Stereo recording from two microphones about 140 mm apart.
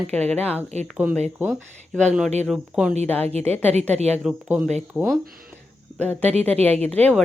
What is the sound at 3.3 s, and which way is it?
Speech, 50° right (ahead or behind).